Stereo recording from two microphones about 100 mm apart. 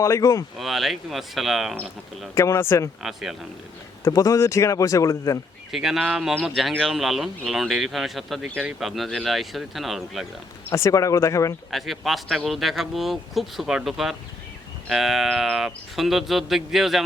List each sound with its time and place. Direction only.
0.0 s speech: 30° left (ahead or behind)
0.6 s speech: centre (ahead or behind)
2.3 s speech: 30° left (ahead or behind)
3.0 s speech: 5° right (ahead or behind)
4.0 s speech: 35° left (ahead or behind)
5.7 s speech: 5° right (ahead or behind)
10.7 s speech: 30° left (ahead or behind)
11.7 s speech: centre (ahead or behind)